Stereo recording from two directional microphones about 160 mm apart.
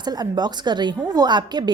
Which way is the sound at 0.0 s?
25° right (ahead or behind).